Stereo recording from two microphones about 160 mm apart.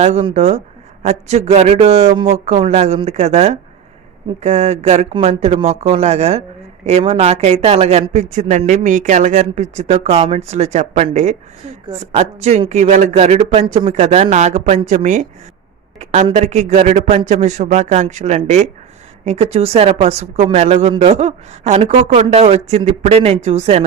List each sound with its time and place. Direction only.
0.0 s speech: 35° right (ahead or behind)